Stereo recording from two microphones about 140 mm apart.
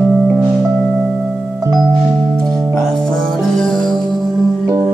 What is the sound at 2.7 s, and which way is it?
Music, 5° left (ahead or behind).